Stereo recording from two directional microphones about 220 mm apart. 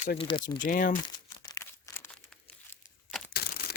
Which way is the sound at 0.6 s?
40° left (ahead or behind).